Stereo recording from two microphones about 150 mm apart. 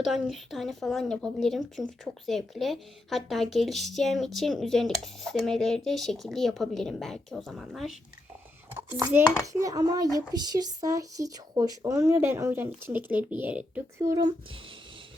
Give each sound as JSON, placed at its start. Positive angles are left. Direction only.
{"t": 0.0, "sound": "a woman's voice", "side_deg": 0}
{"t": 8.7, "sound": "speech", "side_deg": -15}
{"t": 14.0, "sound": "speech", "side_deg": -25}